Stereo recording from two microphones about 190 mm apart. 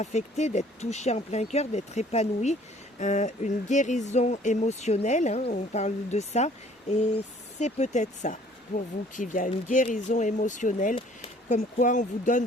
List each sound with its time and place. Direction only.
0.0 s speech: 35° left (ahead or behind)
7.6 s speech: 35° left (ahead or behind)